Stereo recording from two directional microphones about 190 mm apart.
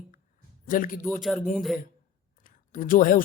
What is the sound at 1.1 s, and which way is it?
Speech, centre (ahead or behind).